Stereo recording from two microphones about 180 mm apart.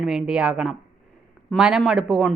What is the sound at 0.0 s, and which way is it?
A woman's voice, centre (ahead or behind).